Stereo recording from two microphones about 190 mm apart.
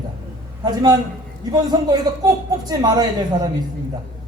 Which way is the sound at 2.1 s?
20° right (ahead or behind).